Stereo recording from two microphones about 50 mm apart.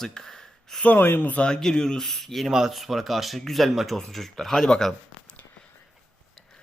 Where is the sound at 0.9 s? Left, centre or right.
Left.